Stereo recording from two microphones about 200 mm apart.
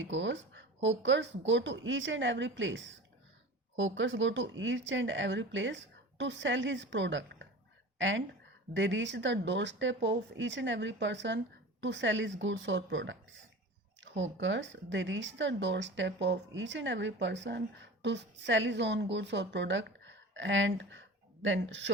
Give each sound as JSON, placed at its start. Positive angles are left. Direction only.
{"t": 0.0, "sound": "a woman's voice", "side_deg": -65}